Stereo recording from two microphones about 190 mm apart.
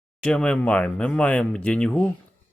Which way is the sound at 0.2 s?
5° left (ahead or behind).